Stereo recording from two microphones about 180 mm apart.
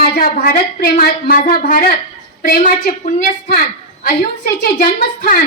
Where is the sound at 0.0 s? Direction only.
50° left (ahead or behind).